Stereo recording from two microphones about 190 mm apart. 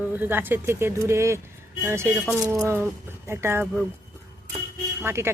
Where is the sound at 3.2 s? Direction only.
15° right (ahead or behind).